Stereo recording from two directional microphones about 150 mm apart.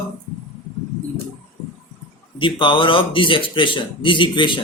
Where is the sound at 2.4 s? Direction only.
35° left (ahead or behind).